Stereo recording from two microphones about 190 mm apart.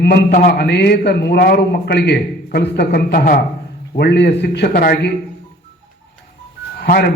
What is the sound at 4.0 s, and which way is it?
A man's voice, 60° left (ahead or behind).